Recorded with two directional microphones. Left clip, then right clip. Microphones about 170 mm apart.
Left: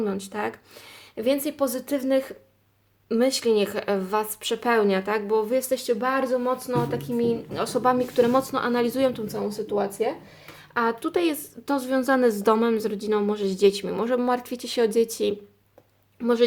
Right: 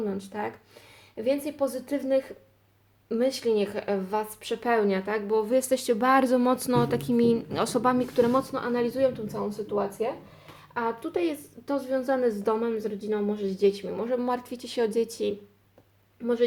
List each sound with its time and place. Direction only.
0.0 s a woman's voice: 30° left (ahead or behind); by 5.4 s 15° left (ahead or behind)
5.4 s speech: 5° right (ahead or behind); by 7.6 s 35° right (ahead or behind)
7.6 s speech: 20° right (ahead or behind)
7.9 s speech: centre (ahead or behind)
8.4 s a woman's voice: 20° left (ahead or behind)
14.3 s speech: 20° left (ahead or behind)